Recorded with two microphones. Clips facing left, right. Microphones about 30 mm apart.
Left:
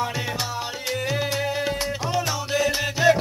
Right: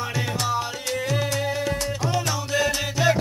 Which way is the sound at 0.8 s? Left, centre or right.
Centre.